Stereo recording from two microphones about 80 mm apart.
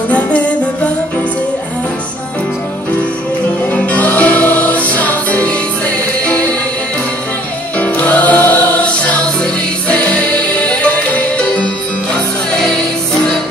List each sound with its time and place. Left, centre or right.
3.7 s music: centre
7.8 s music: left